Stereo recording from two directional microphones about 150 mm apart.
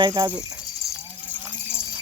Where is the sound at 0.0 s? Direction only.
30° right (ahead or behind).